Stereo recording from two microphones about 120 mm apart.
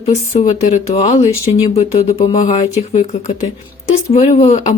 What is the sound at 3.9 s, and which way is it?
Speech, 60° left (ahead or behind).